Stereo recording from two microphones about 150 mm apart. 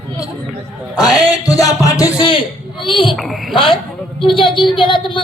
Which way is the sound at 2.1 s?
35° left (ahead or behind).